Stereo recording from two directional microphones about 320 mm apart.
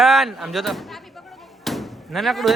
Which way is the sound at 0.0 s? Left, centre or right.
Centre.